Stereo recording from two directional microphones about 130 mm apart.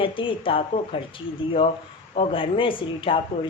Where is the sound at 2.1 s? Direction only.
40° left (ahead or behind).